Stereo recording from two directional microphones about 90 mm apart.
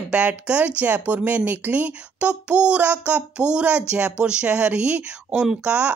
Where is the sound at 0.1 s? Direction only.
15° right (ahead or behind).